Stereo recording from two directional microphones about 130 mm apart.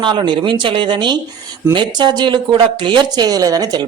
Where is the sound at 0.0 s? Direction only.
35° right (ahead or behind).